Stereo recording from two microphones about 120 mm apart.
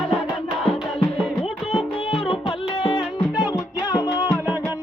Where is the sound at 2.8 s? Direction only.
45° left (ahead or behind).